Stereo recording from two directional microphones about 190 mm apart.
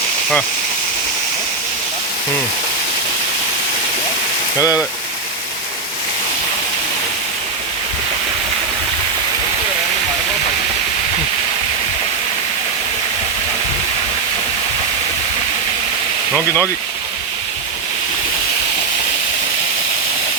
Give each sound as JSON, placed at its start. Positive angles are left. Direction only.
{"t": 16.3, "sound": "speech", "side_deg": -15}